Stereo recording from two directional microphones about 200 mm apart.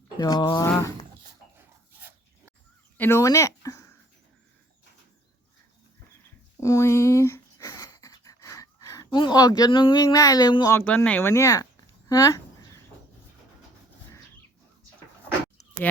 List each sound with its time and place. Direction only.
0.2 s speech: 20° left (ahead or behind)
3.0 s speech: 15° left (ahead or behind)
6.6 s a sound: 15° left (ahead or behind)